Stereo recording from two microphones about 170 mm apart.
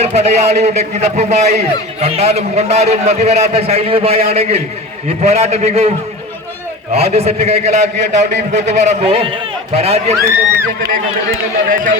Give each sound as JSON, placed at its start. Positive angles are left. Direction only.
{"t": 0.0, "sound": "a man's voice", "side_deg": -40}
{"t": 6.9, "sound": "a man's voice", "side_deg": -40}
{"t": 11.7, "sound": "speech", "side_deg": -55}